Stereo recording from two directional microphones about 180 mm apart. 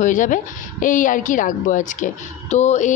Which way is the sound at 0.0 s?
45° left (ahead or behind).